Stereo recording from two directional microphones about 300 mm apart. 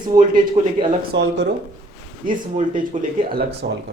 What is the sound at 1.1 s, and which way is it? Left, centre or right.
Speech, right.